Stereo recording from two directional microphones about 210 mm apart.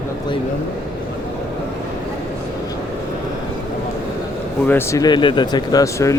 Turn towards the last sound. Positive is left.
turn(degrees=15)  # may be behind; listen again after turning